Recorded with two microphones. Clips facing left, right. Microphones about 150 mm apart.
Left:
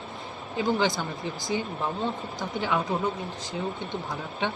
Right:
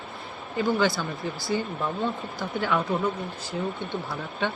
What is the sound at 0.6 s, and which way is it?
Speech, 20° left (ahead or behind).